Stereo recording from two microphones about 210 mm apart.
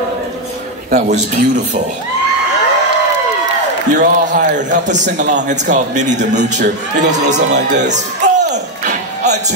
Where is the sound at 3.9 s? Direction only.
35° right (ahead or behind).